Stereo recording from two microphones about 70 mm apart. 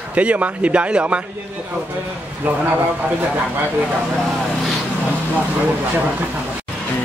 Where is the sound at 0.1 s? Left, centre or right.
Centre.